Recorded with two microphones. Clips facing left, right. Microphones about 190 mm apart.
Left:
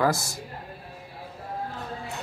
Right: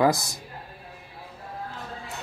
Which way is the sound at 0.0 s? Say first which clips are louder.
Right 3 dB; 15° right (ahead or behind).